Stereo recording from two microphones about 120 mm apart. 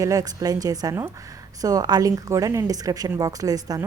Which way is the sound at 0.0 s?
30° right (ahead or behind).